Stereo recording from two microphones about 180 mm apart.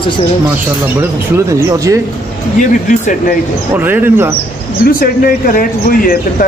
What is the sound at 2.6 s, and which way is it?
Speech, 45° left (ahead or behind).